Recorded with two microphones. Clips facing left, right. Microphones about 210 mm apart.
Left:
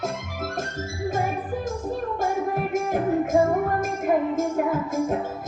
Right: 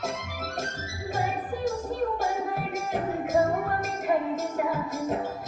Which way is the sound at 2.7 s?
50° left (ahead or behind).